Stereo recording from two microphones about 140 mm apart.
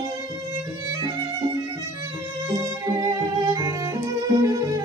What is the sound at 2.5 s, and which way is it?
Music, 25° right (ahead or behind).